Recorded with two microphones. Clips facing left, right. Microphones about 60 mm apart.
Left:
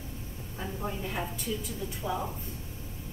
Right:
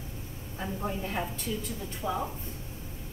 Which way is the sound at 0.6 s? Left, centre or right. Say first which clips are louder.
Right 2 dB; centre.